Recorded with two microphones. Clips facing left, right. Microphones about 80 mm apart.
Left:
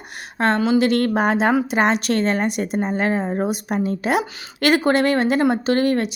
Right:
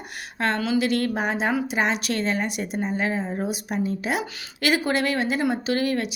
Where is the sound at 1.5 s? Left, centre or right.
Left.